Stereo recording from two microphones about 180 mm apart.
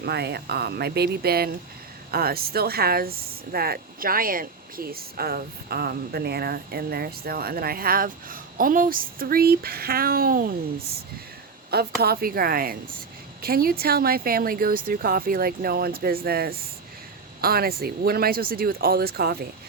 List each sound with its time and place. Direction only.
0.0 s speech: 65° right (ahead or behind)
11.7 s speech: 60° right (ahead or behind)